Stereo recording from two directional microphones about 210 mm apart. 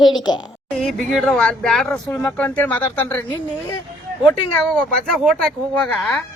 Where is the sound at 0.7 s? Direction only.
Centre (ahead or behind).